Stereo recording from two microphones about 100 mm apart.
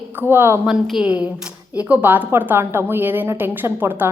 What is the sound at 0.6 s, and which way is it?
A woman's voice, 5° right (ahead or behind).